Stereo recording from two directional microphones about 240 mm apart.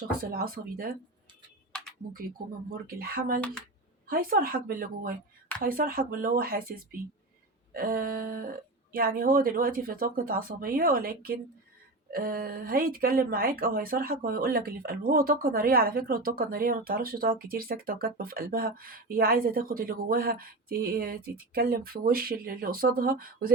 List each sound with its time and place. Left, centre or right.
0.2 s speech: right
1.7 s typing: centre
2.6 s speech: right